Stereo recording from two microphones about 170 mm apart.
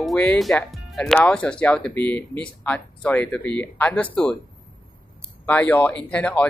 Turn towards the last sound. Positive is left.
turn(degrees=5)  # may be behind; listen again after turning